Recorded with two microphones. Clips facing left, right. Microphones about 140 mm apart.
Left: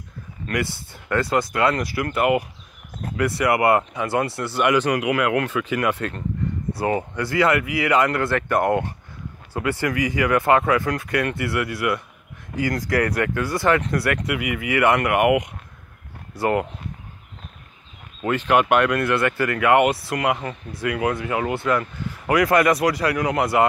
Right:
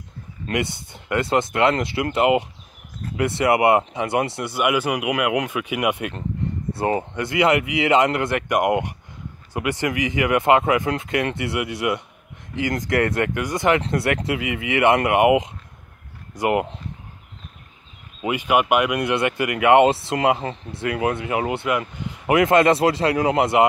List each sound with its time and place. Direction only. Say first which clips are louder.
0.5 s speech: right 1 dB; 20° right (ahead or behind)
4.6 s speech: left 2 dB; 10° right (ahead or behind)
6.7 s speech: right 1 dB; 25° right (ahead or behind)
18.2 s speech: left 1 dB; 10° right (ahead or behind)